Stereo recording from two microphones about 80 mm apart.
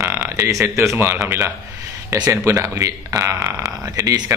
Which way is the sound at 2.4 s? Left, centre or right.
Right.